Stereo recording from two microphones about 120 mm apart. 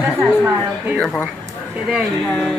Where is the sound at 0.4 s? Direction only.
20° right (ahead or behind).